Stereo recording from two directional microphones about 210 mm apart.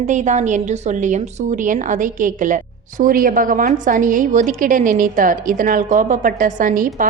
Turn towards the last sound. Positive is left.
turn(degrees=-40)  # may be behind; listen again after turning